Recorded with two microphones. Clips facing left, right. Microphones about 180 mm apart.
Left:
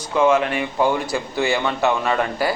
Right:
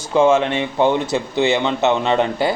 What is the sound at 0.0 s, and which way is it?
A man's voice, 25° right (ahead or behind).